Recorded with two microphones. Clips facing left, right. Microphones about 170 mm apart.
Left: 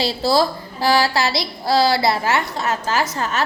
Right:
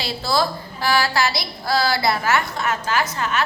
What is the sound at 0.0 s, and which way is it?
A woman's voice, 35° left (ahead or behind).